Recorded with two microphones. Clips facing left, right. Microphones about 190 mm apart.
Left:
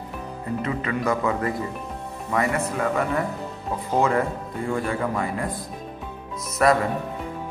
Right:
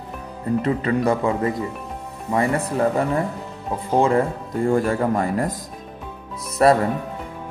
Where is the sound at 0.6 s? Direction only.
35° right (ahead or behind).